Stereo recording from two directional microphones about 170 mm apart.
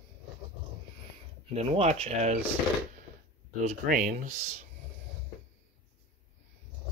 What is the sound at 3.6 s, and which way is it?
Speech, 50° right (ahead or behind).